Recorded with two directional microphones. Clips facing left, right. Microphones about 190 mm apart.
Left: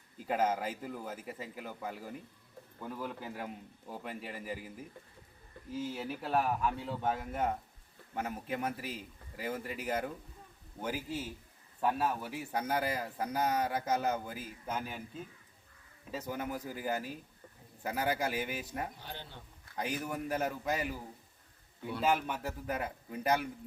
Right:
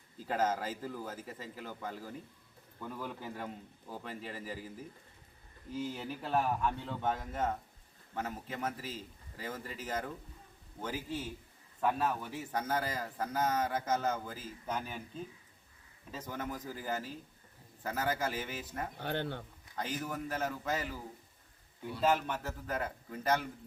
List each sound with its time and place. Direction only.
0.3 s speech: 10° left (ahead or behind)
5.7 s speech: 5° left (ahead or behind)
16.1 s speech: 10° left (ahead or behind)
18.9 s speech: 60° right (ahead or behind)
19.7 s speech: 10° left (ahead or behind)
22.0 s speech: 10° left (ahead or behind)